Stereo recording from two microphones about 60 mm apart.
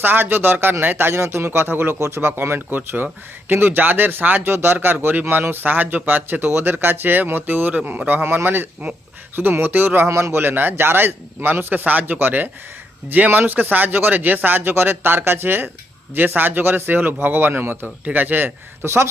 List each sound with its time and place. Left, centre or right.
0.0 s speech: right